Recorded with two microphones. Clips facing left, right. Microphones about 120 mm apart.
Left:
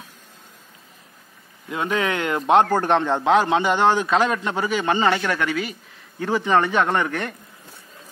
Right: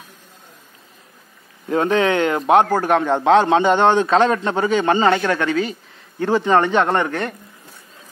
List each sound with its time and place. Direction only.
1.7 s a man's voice: 30° right (ahead or behind)